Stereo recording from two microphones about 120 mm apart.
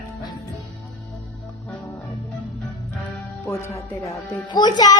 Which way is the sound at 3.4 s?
20° left (ahead or behind).